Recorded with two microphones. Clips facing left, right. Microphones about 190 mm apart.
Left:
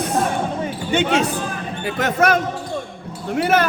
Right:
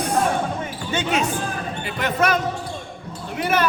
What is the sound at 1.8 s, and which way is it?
Speech, 45° left (ahead or behind).